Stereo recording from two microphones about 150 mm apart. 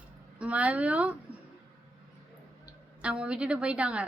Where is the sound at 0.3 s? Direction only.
10° right (ahead or behind).